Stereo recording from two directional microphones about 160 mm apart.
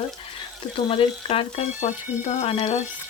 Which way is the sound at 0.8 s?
35° left (ahead or behind).